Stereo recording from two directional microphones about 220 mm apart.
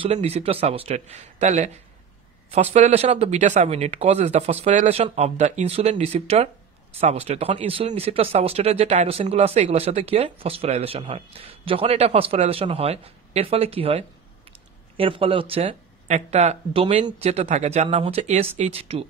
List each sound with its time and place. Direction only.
0.0 s speech: 30° right (ahead or behind)